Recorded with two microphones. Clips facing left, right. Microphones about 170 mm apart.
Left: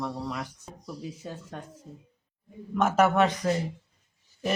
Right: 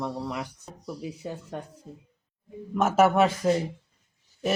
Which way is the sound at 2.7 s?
5° right (ahead or behind).